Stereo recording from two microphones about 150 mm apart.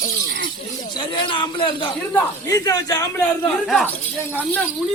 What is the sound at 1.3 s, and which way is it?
A man's voice, 35° left (ahead or behind).